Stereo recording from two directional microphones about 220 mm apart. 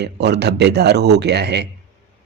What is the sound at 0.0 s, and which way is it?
Speech, 50° right (ahead or behind).